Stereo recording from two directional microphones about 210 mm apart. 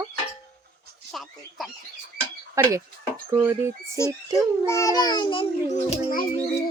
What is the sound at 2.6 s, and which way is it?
Speech, 15° right (ahead or behind).